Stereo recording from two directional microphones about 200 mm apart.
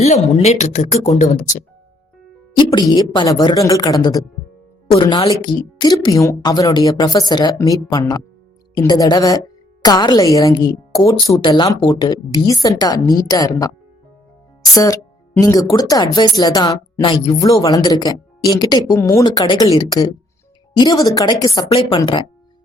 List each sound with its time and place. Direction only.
0.0 s a woman's voice: 35° left (ahead or behind)
2.6 s a woman's voice: 20° left (ahead or behind)
14.8 s a woman's voice: 15° left (ahead or behind)